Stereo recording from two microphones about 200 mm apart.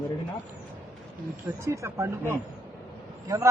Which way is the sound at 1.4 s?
15° right (ahead or behind).